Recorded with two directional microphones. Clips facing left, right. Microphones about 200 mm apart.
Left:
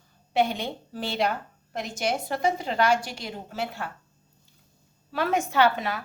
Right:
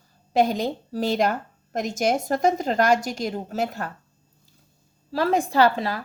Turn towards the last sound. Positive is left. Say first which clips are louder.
# right 3 dB
turn(degrees=-30)  # may be behind; listen again after turning